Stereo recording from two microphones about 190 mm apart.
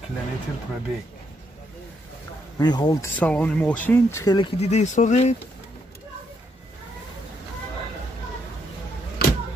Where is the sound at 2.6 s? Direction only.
20° left (ahead or behind).